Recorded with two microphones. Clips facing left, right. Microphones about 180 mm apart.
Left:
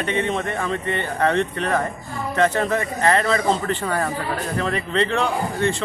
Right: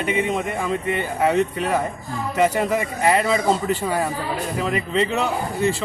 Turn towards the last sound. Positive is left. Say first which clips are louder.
# even
turn(degrees=-5)  # may be behind; listen again after turning